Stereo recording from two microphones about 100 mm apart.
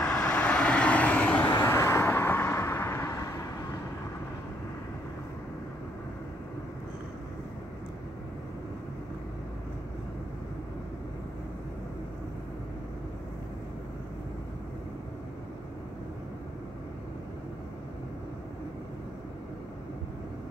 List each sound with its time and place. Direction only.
0.0 s vehicle: 10° left (ahead or behind)
1.5 s vehicle: 25° left (ahead or behind)